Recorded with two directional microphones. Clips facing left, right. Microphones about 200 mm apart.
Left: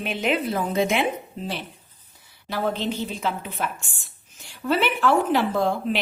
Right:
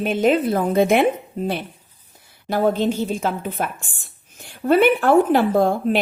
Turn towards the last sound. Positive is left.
turn(degrees=-50)  # may be behind; listen again after turning